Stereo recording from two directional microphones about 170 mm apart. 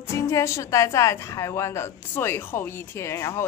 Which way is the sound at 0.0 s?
15° left (ahead or behind).